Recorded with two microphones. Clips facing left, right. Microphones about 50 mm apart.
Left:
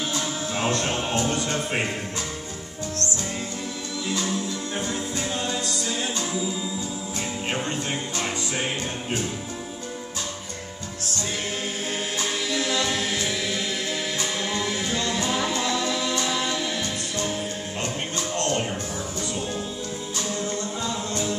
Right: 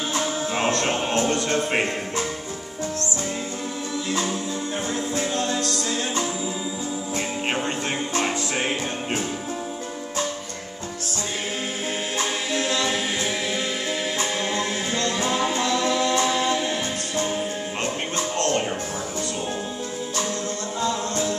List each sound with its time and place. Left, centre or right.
0.2 s music: right
0.8 s speech: right
12.2 s a capella: right
14.4 s music: centre
16.3 s a capella: centre
17.2 s music: centre